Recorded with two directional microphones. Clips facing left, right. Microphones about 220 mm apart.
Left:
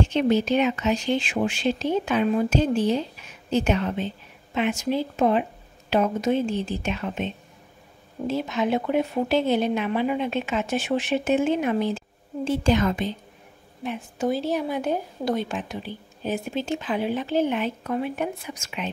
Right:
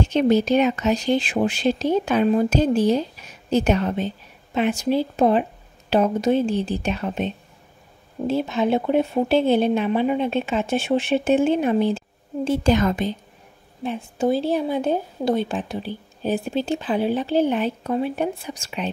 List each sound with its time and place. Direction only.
0.1 s speech: 40° right (ahead or behind)
12.4 s a woman's voice: 45° right (ahead or behind)
13.8 s speech: 30° right (ahead or behind)